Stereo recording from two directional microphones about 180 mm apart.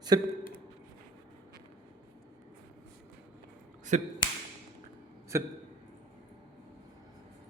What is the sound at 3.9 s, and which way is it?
Speech, 40° right (ahead or behind).